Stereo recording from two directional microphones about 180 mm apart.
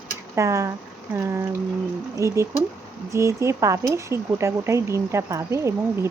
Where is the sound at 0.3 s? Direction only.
15° right (ahead or behind).